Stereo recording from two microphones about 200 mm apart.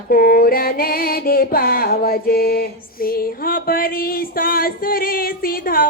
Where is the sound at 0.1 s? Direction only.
45° left (ahead or behind).